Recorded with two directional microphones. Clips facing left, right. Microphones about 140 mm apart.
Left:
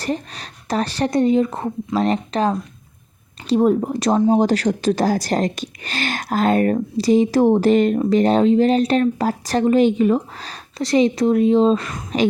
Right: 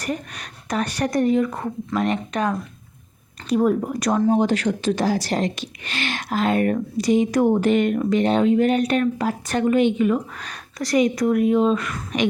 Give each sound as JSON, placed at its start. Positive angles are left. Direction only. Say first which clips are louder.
{"t": 0.0, "sound": "speech", "louder": "left 3 dB", "side_deg": 30}